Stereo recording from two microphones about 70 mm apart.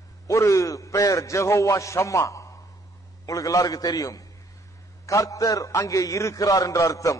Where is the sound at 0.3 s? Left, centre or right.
Left.